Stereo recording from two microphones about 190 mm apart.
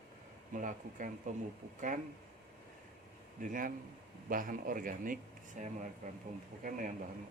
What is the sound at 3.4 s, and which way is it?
Speech, 45° right (ahead or behind).